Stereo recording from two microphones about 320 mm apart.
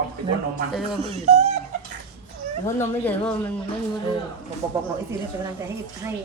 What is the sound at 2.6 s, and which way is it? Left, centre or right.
Speech, centre.